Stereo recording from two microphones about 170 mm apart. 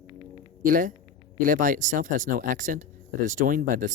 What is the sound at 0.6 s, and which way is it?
Speech, 50° right (ahead or behind).